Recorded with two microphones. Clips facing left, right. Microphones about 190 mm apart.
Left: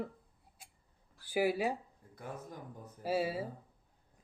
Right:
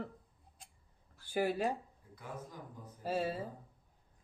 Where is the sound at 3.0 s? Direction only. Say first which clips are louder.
Left 2 dB; 10° left (ahead or behind).